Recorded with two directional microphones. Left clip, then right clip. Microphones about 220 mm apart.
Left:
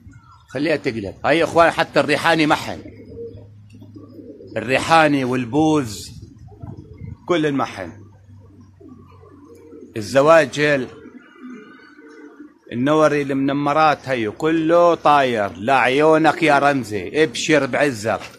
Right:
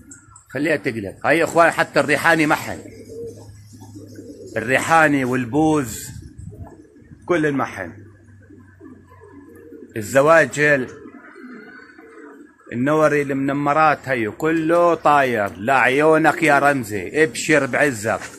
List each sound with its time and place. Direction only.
0.5 s speech: 15° left (ahead or behind)
4.6 s speech: 10° left (ahead or behind)
7.2 s speech: 15° left (ahead or behind)
9.9 s speech: 10° left (ahead or behind)
12.6 s speech: 15° left (ahead or behind)